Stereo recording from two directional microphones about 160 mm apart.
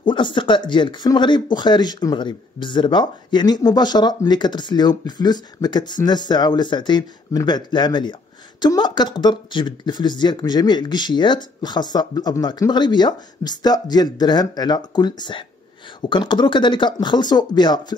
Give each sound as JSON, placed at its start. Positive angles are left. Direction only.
{"t": 0.0, "sound": "speech", "side_deg": 30}